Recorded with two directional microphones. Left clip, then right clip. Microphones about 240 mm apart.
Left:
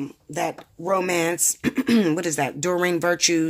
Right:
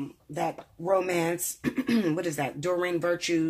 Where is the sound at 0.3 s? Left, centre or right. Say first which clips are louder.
Left 4 dB; left.